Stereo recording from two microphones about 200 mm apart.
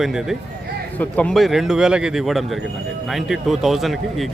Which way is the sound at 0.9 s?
5° left (ahead or behind).